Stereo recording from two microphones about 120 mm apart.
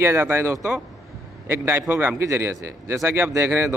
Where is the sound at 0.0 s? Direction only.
20° right (ahead or behind).